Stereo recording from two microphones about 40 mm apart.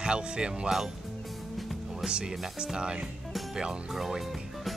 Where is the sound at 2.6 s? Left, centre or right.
Right.